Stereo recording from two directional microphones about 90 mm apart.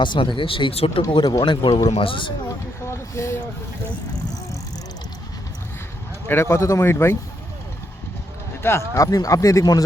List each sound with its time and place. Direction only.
0.0 s a man's voice: 65° left (ahead or behind); by 1.0 s 90° left
1.1 s a man's voice: 55° left (ahead or behind)
2.0 s speech: 75° left (ahead or behind)
2.8 s speech: 30° left (ahead or behind)
6.2 s speech: 25° left (ahead or behind)
8.6 s speech: 30° left (ahead or behind)